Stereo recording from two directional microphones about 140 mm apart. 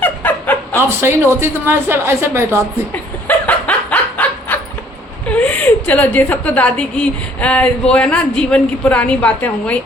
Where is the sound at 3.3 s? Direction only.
10° left (ahead or behind).